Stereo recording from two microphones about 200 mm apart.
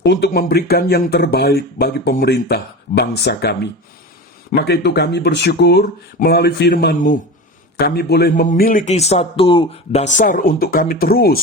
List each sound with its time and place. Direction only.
0.0 s a man's voice: 55° left (ahead or behind)